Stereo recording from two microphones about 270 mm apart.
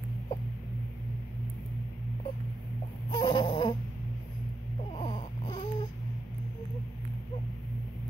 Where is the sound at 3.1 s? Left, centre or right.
Centre.